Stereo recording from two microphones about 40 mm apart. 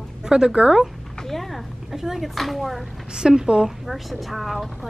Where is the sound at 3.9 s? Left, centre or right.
Centre.